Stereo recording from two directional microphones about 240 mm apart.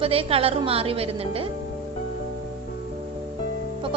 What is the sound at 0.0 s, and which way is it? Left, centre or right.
A woman's voice, right.